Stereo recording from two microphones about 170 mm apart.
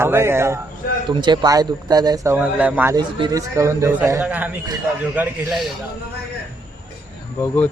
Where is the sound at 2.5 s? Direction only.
10° right (ahead or behind).